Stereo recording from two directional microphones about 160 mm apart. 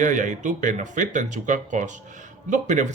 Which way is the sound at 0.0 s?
50° right (ahead or behind).